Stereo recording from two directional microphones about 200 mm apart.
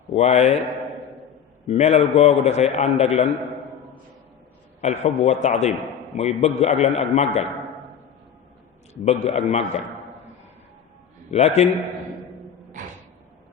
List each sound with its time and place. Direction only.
0.1 s a man's voice: 35° left (ahead or behind)
1.6 s a man's voice: 30° left (ahead or behind)
4.8 s a man's voice: 35° left (ahead or behind)
9.0 s a man's voice: 35° left (ahead or behind)
11.3 s a man's voice: 35° left (ahead or behind)